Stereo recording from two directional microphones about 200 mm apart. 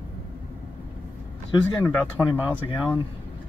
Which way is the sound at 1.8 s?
10° left (ahead or behind).